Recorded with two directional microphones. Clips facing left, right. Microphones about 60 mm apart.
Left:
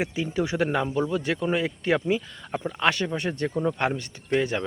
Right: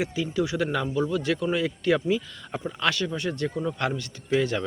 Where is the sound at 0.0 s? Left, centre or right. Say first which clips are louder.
Even; left.